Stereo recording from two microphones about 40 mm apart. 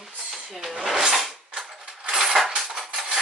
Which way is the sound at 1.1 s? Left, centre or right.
Centre.